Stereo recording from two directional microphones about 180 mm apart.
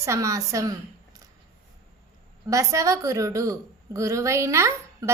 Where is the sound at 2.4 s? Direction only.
20° right (ahead or behind).